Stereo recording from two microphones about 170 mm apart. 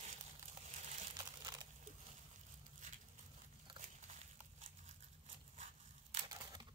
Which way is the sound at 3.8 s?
45° right (ahead or behind).